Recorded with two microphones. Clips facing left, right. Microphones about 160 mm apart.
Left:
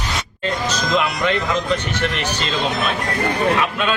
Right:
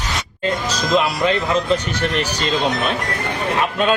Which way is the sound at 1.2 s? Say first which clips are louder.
Right 2 dB; 30° right (ahead or behind).